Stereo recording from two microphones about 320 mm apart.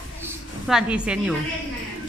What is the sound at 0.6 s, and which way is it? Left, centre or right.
Speech, centre.